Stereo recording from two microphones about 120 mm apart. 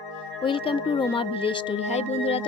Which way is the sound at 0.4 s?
45° left (ahead or behind).